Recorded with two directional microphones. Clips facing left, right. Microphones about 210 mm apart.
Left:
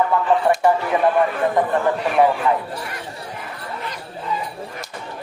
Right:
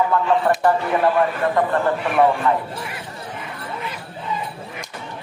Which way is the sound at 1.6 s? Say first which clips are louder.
Even; 15° left (ahead or behind).